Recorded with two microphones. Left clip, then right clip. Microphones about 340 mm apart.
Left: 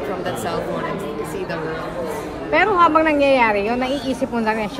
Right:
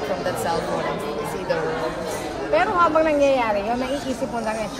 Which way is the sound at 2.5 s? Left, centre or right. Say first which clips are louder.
Left 4 dB; left.